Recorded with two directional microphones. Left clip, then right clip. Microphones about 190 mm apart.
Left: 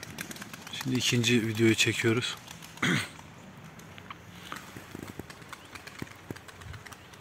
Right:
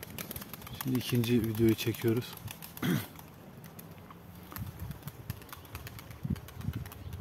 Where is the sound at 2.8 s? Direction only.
15° right (ahead or behind).